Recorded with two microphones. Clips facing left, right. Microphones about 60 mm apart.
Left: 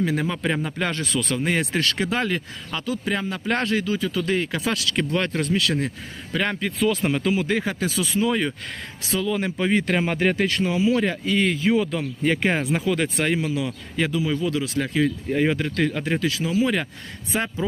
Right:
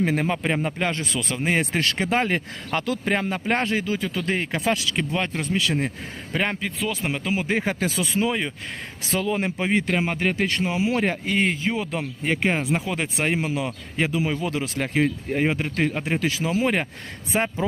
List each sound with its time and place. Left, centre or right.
0.0 s speech: right
0.8 s speech: centre
1.0 s a man's voice: right
3.5 s speech: right
4.9 s speech: centre
5.5 s a man's voice: right
6.6 s speech: centre
7.3 s speech: right
9.7 s speech: centre
10.7 s speech: right
11.5 s speech: centre
12.9 s a man's voice: centre
13.6 s a man's voice: right